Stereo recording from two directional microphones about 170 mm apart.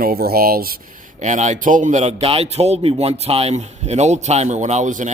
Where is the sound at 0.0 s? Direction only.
60° right (ahead or behind).